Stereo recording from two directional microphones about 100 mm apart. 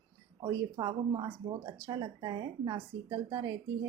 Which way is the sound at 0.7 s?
50° right (ahead or behind).